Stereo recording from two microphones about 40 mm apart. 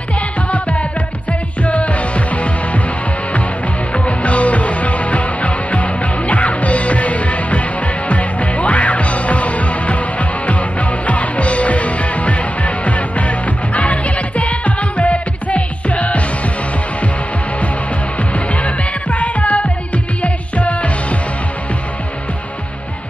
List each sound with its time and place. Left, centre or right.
0.5 s music: left
3.9 s music: left
18.5 s music: left